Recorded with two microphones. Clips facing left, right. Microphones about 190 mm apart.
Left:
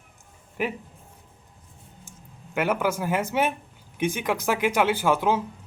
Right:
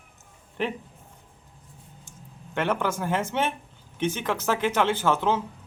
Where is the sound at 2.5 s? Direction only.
10° left (ahead or behind).